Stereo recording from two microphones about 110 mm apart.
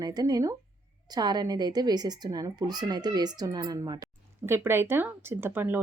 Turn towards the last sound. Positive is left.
turn(degrees=-20)  # may be behind; listen again after turning